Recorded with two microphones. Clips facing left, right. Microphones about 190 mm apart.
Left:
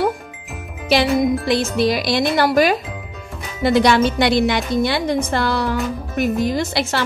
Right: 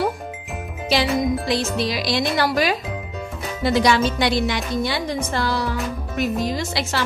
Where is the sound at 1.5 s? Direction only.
55° left (ahead or behind).